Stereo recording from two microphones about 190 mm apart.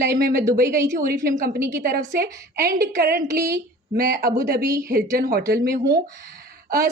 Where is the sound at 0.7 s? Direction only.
15° right (ahead or behind).